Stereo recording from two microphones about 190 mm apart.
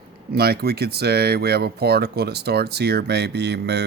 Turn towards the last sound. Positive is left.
turn(degrees=-60)  # may be behind; listen again after turning